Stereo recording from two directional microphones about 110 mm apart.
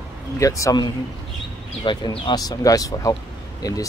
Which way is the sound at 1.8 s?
45° left (ahead or behind).